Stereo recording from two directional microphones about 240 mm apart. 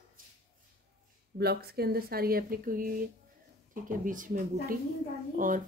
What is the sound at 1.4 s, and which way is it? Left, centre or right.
Speech, right.